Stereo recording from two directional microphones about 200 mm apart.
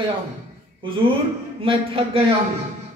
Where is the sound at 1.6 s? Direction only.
25° right (ahead or behind).